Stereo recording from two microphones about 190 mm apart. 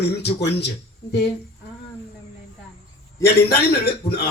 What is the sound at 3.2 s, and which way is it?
Speech, 60° left (ahead or behind).